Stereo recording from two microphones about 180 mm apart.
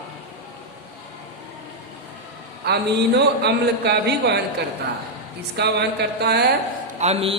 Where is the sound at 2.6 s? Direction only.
65° right (ahead or behind).